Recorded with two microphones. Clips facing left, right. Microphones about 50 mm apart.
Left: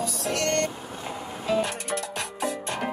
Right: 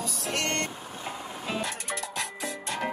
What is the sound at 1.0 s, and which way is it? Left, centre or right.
Music, centre.